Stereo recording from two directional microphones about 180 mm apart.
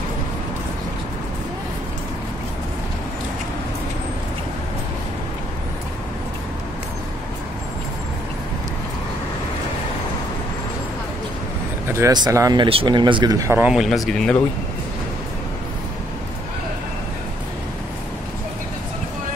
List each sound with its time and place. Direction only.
11.9 s speech: 20° right (ahead or behind)
12.6 s speech: 30° right (ahead or behind); by 14.3 s centre (ahead or behind)